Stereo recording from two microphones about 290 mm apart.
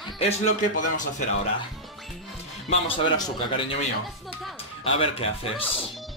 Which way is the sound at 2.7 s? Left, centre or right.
Centre.